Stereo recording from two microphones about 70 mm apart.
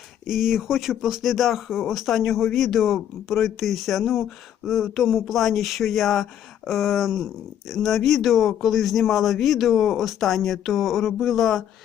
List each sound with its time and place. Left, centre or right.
0.3 s speech: centre